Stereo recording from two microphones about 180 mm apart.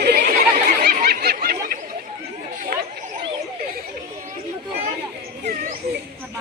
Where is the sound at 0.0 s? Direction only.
60° right (ahead or behind).